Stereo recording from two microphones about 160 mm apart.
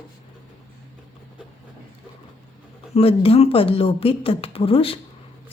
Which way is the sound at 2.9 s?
40° left (ahead or behind).